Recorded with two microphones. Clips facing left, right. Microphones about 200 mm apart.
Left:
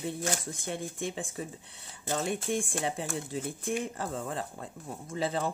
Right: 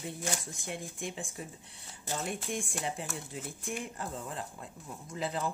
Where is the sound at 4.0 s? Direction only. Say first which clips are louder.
Left 5 dB; 75° left (ahead or behind).